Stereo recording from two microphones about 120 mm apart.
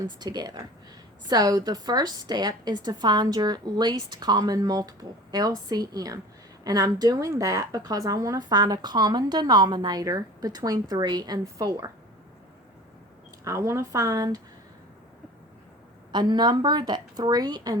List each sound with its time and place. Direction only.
0.0 s speech: 35° right (ahead or behind)
13.4 s speech: 25° right (ahead or behind)
16.1 s speech: 35° right (ahead or behind)